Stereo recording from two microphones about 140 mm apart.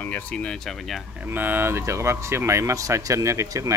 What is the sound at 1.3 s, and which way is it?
Speech, 15° right (ahead or behind).